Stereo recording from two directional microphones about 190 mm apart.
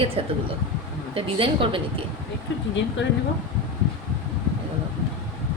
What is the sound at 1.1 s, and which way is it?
Speech, 30° right (ahead or behind).